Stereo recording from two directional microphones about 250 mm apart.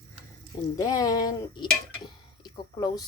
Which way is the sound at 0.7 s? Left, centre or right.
Centre.